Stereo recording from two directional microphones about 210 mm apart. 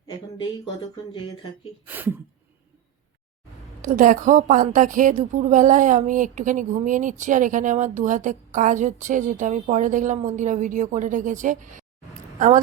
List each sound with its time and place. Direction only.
1.9 s speech: 10° right (ahead or behind)
3.8 s a woman's voice: 40° right (ahead or behind)